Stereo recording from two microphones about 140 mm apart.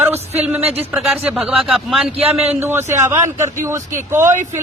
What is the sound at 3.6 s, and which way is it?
Speech, 20° right (ahead or behind).